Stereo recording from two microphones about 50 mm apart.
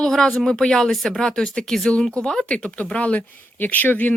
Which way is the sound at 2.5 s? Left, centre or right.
Left.